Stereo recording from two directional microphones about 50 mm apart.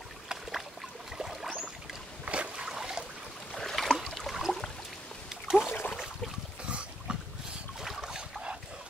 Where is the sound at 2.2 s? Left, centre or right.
Right.